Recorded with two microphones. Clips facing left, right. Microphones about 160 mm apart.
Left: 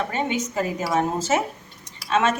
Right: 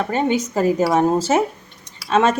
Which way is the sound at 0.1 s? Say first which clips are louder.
Right 6 dB; 35° right (ahead or behind).